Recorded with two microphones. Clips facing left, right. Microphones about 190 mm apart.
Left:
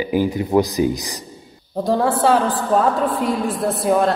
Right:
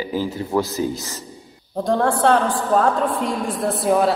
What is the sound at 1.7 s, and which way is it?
A woman's voice, 5° left (ahead or behind).